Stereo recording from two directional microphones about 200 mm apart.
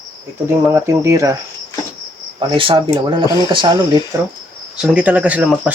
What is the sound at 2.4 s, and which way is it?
Speech, 25° right (ahead or behind).